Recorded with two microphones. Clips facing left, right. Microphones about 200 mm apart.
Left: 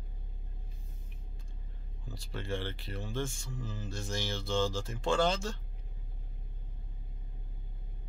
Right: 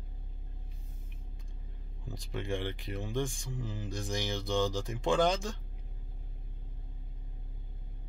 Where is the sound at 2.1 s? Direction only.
15° right (ahead or behind).